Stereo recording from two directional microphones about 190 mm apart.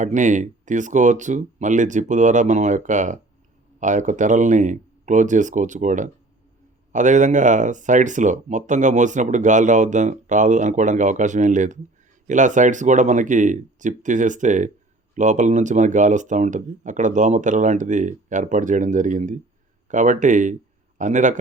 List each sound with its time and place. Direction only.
0.0 s speech: 40° right (ahead or behind)